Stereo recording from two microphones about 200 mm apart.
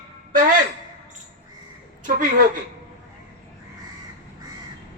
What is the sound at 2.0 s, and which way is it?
Speech, 40° right (ahead or behind).